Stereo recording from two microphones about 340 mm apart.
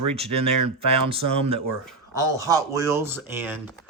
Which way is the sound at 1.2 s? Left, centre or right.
Right.